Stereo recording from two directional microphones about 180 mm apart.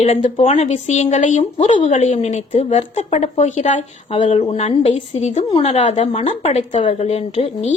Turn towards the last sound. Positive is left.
turn(degrees=35)  # may be behind; listen again after turning